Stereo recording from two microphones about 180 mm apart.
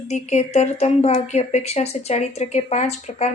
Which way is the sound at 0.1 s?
40° left (ahead or behind).